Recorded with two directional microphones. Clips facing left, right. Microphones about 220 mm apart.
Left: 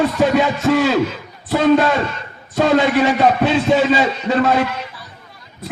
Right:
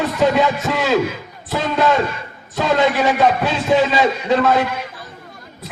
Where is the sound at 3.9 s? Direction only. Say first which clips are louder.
Even; 45° left (ahead or behind).